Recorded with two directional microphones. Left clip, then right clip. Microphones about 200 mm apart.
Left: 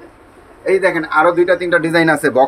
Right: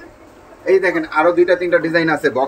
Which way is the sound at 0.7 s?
40° left (ahead or behind).